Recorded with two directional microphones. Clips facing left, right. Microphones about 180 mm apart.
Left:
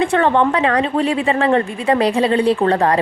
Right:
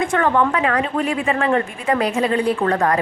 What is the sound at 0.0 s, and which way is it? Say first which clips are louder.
A woman's voice: left 3 dB; 30° left (ahead or behind).